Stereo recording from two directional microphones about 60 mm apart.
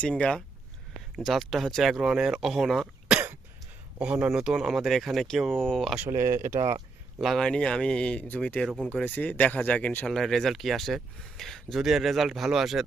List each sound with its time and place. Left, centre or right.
0.0 s speech: centre
1.1 s speech: centre
4.0 s speech: centre
4.3 s speech: centre
6.1 s speech: right
7.3 s speech: centre
9.0 s speech: left
10.1 s speech: centre